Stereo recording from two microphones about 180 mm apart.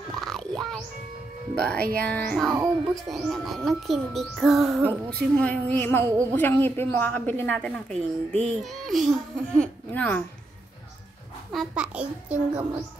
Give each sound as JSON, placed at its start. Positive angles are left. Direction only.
{"t": 0.1, "sound": "a sound", "side_deg": 0}
{"t": 1.5, "sound": "a child's voice", "side_deg": 5}
{"t": 2.5, "sound": "speech", "side_deg": -20}
{"t": 3.1, "sound": "a child's voice", "side_deg": 0}
{"t": 11.5, "sound": "a child's voice", "side_deg": -5}